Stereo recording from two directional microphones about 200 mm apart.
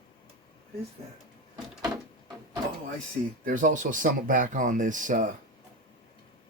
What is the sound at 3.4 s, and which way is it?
Speech, 40° right (ahead or behind).